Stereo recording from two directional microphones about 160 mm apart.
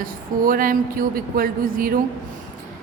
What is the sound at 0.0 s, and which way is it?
A woman's voice, 60° right (ahead or behind).